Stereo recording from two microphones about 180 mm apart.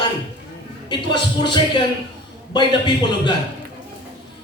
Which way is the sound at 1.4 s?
25° left (ahead or behind).